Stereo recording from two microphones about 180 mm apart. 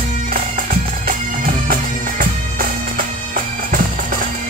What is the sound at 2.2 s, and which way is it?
Bagpipes, 50° right (ahead or behind).